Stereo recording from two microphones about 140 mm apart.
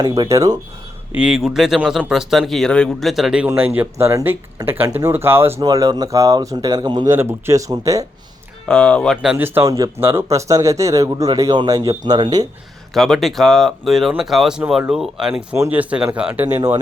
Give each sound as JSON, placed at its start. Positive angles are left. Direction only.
{"t": 0.0, "sound": "speech", "side_deg": -25}
{"t": 1.1, "sound": "speech", "side_deg": -5}
{"t": 5.6, "sound": "speech", "side_deg": -25}
{"t": 8.6, "sound": "speech", "side_deg": 5}
{"t": 9.2, "sound": "speech", "side_deg": -10}
{"t": 12.9, "sound": "speech", "side_deg": 0}
{"t": 15.5, "sound": "speech", "side_deg": -15}
{"t": 16.6, "sound": "speech", "side_deg": -25}